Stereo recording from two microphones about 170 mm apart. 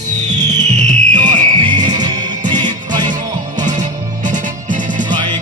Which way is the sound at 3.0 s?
45° right (ahead or behind).